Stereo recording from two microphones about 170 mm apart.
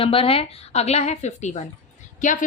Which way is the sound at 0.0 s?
35° left (ahead or behind).